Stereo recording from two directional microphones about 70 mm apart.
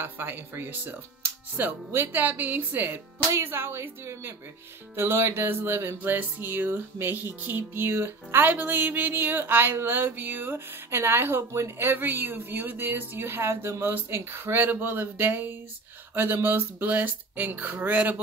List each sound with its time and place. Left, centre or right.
0.0 s speech: right
3.4 s music: right
13.9 s speech: right
16.2 s music: right
16.8 s speech: right